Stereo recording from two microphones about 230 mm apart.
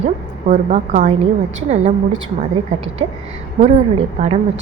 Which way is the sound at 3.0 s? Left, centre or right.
Centre.